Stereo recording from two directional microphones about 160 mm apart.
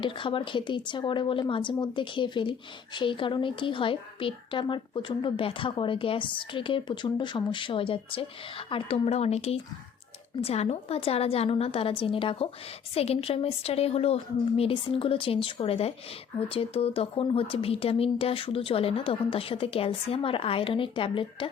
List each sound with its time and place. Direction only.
0.0 s speech: 30° left (ahead or behind)